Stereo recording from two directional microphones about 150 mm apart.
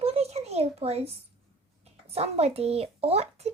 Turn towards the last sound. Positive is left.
turn(degrees=-45)  # may be behind; listen again after turning